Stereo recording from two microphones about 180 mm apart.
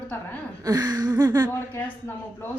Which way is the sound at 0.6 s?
20° right (ahead or behind).